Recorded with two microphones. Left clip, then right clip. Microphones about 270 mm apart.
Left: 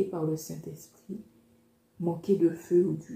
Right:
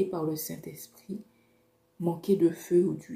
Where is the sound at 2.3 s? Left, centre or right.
Right.